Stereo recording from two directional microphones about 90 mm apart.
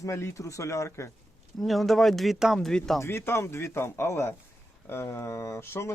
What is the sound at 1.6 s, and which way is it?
Speech, centre (ahead or behind).